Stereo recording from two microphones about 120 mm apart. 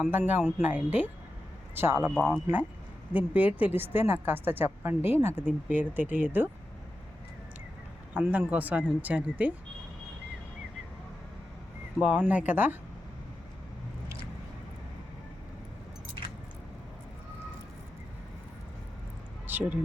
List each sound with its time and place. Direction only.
0.1 s a woman's voice: 15° right (ahead or behind)
3.1 s a woman's voice: 10° right (ahead or behind)
8.1 s a woman's voice: 10° right (ahead or behind)
11.9 s a woman's voice: 10° right (ahead or behind)
19.5 s speech: 15° right (ahead or behind)